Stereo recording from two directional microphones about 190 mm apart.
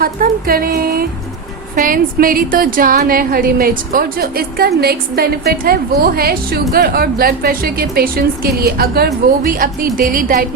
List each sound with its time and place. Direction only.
0.0 s a woman's voice: 50° right (ahead or behind)